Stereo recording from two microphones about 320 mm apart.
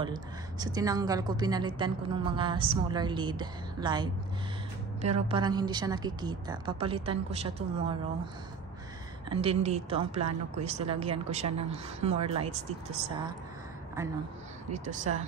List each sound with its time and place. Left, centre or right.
0.0 s a woman's voice: centre
9.3 s speech: centre
14.9 s speech: right